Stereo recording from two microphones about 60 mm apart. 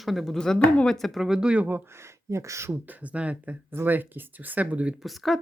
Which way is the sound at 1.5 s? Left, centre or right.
Right.